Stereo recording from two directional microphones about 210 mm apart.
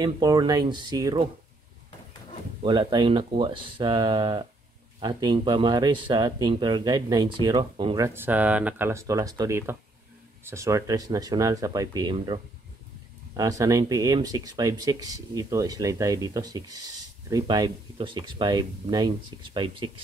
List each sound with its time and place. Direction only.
0.0 s speech: 20° right (ahead or behind)
2.6 s speech: 25° right (ahead or behind)
13.4 s speech: 15° right (ahead or behind)